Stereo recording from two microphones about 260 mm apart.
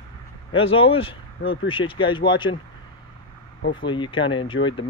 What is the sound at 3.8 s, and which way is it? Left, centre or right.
Speech, centre.